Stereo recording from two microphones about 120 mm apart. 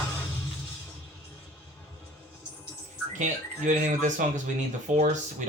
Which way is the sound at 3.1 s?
90° right.